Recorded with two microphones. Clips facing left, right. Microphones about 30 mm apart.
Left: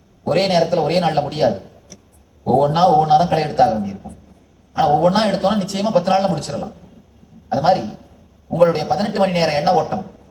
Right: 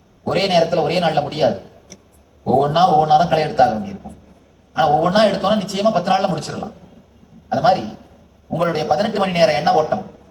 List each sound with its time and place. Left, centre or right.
0.3 s a man's voice: right
2.7 s a man's voice: right
4.8 s a man's voice: right
8.6 s a man's voice: right